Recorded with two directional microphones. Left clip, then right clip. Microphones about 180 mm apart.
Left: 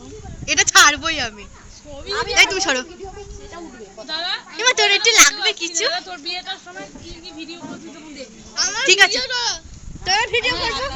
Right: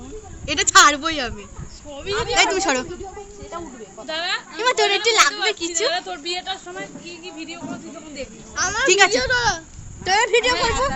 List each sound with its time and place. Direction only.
0.4 s speech: centre (ahead or behind)
2.3 s speech: centre (ahead or behind)
4.1 s a sound: 25° right (ahead or behind)
4.5 s speech: 5° right (ahead or behind)
5.9 s a woman's voice: 35° right (ahead or behind)
8.5 s a child's voice: 55° right (ahead or behind)
8.9 s speech: 5° right (ahead or behind)
9.1 s speech: 45° right (ahead or behind)
10.0 s a woman's voice: 25° right (ahead or behind)